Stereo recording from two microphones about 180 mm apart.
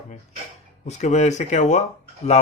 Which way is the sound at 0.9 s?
40° left (ahead or behind).